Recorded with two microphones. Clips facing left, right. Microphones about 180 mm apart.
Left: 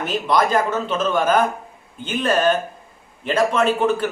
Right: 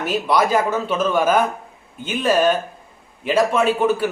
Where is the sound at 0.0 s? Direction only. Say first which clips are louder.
Right 1 dB; 10° right (ahead or behind).